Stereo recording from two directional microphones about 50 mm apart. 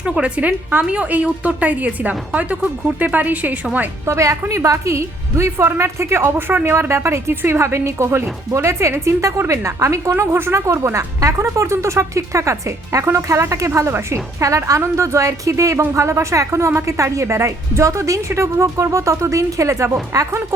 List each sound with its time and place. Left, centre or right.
0.0 s a woman's voice: right
4.0 s speech: right
6.3 s speech: right
6.7 s speech: right
16.0 s speech: right